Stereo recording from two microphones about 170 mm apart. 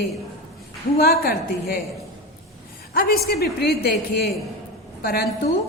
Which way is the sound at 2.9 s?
65° left (ahead or behind).